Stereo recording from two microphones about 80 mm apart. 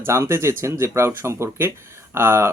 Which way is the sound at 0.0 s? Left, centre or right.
Right.